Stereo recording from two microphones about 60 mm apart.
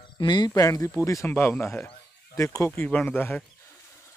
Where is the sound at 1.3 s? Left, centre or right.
Left.